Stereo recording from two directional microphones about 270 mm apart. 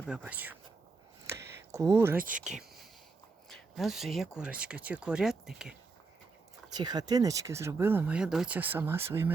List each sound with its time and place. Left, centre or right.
0.0 s speech: centre
1.7 s speech: centre
2.1 s speech: right
2.4 s speech: centre
6.7 s speech: centre